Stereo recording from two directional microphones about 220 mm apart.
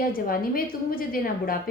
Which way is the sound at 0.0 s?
40° left (ahead or behind).